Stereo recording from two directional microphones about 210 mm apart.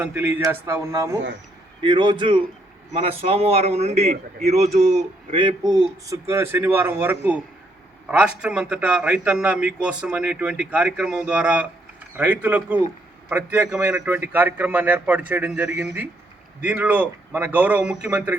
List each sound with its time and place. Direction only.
0.0 s a man's voice: 10° right (ahead or behind)